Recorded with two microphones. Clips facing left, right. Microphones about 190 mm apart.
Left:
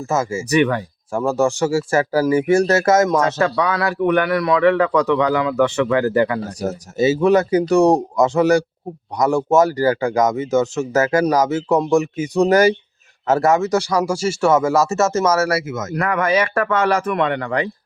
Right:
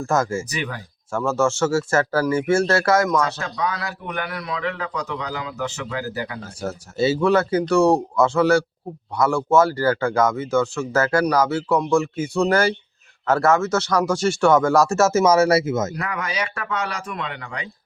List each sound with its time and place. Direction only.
0.0 s speech: 5° left (ahead or behind)
0.5 s a man's voice: 65° left (ahead or behind)
1.3 s speech: 15° left (ahead or behind)
3.3 s a man's voice: 70° left (ahead or behind)
6.6 s speech: 20° left (ahead or behind); by 15.9 s 25° right (ahead or behind)
16.0 s a man's voice: 55° left (ahead or behind)